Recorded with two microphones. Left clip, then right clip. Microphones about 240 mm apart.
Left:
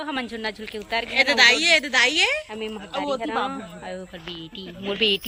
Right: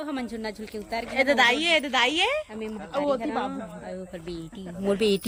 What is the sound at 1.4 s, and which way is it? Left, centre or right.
A woman's voice, centre.